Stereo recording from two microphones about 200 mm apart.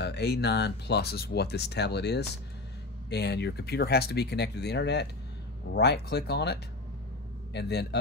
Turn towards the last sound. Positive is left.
turn(degrees=55)  # may be behind; listen again after turning